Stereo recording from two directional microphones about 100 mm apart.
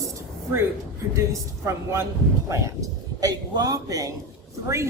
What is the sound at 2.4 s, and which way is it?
Speech, 30° right (ahead or behind).